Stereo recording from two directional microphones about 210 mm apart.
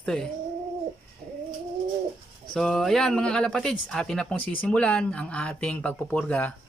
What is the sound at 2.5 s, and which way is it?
A man's voice, centre (ahead or behind).